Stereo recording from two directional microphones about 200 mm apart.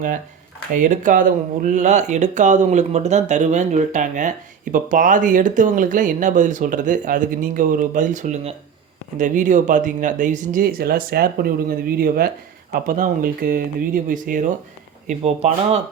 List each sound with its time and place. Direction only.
0.7 s speech: 40° right (ahead or behind)